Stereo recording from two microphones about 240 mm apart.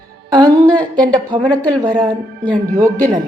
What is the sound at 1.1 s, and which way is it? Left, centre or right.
Speech, centre.